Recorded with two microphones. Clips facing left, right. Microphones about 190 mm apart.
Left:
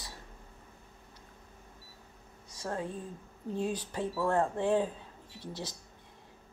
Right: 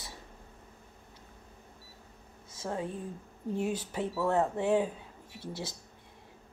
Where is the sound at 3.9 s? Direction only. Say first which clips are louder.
Right 1 dB; 10° right (ahead or behind).